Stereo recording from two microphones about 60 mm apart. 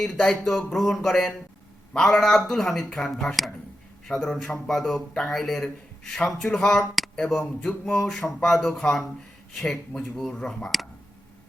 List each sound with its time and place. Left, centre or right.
0.0 s speech: centre
7.7 s a sound: left
8.0 s speech: centre